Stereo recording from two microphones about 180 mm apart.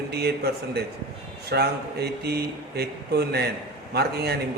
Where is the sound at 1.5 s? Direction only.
65° right (ahead or behind).